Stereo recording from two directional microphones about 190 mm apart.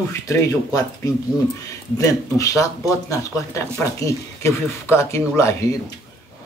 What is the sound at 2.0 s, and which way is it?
Speech, 15° left (ahead or behind).